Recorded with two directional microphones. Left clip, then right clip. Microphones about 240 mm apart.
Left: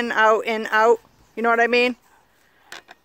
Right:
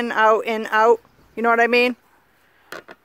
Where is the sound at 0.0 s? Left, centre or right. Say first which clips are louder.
Right 1 dB; centre.